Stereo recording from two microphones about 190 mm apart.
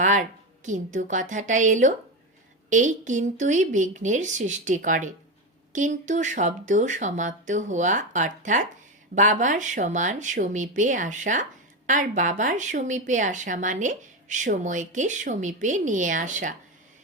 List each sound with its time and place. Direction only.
0.0 s speech: 40° right (ahead or behind)